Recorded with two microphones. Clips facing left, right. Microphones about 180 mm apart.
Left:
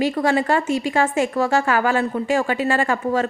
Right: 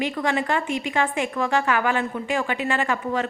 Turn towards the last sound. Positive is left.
turn(degrees=40)  # may be behind; listen again after turning